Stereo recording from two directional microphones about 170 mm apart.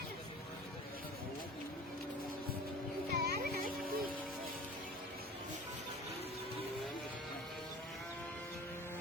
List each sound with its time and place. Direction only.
3.1 s music: 65° right (ahead or behind)